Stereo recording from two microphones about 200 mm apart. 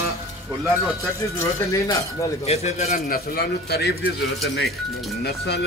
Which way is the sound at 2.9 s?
45° left (ahead or behind).